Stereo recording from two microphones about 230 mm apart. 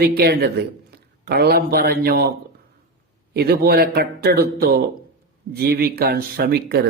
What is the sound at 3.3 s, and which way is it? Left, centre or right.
Speech, right.